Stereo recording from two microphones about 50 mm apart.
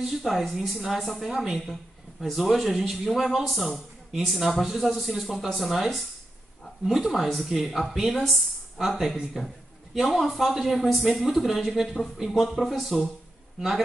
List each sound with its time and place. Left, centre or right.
0.0 s a man's voice: centre